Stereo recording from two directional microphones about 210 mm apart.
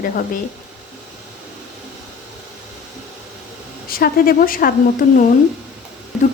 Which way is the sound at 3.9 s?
45° left (ahead or behind).